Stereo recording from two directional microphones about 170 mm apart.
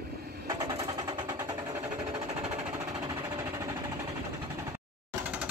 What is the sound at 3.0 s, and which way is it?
Sewing machine, 20° right (ahead or behind).